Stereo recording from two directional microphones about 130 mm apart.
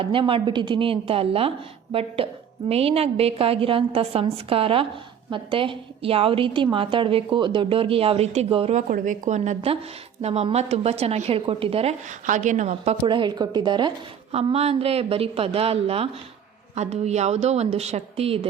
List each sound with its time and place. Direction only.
0.0 s a woman's voice: 40° right (ahead or behind)
8.7 s a woman's voice: 80° right; by 11.9 s 50° right (ahead or behind)
12.2 s a woman's voice: 75° right (ahead or behind); by 13.0 s 55° right (ahead or behind)
13.1 s a woman's voice: 35° right (ahead or behind)
14.3 s a woman's voice: 50° right (ahead or behind)